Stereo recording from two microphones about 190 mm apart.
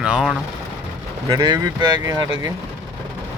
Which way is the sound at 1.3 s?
20° right (ahead or behind).